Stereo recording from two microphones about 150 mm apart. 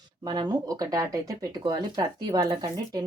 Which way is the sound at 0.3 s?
25° right (ahead or behind).